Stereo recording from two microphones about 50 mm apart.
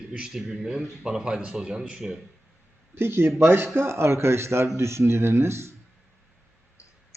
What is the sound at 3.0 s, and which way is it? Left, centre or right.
Speech, right.